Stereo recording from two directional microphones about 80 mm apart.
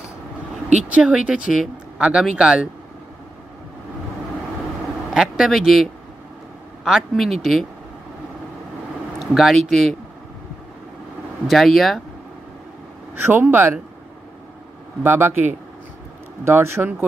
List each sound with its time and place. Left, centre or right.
0.8 s speech: centre
5.1 s speech: centre
9.2 s speech: centre
11.4 s speech: centre
13.1 s speech: right
15.0 s speech: right
16.4 s speech: right